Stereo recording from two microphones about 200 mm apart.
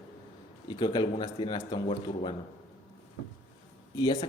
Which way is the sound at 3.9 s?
20° left (ahead or behind).